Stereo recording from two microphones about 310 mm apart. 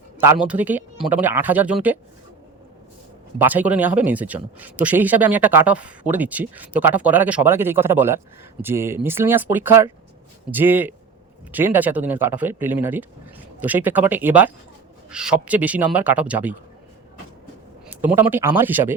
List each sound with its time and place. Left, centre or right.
0.2 s a man's voice: centre
3.3 s a man's voice: centre
17.8 s speech: centre